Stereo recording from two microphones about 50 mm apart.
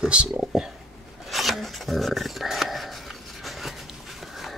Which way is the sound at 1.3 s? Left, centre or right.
Centre.